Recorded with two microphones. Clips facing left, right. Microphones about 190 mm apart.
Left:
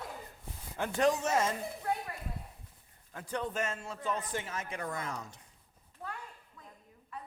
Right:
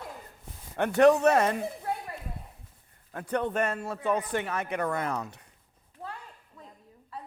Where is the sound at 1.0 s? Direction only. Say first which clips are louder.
Right 9 dB; 65° right (ahead or behind).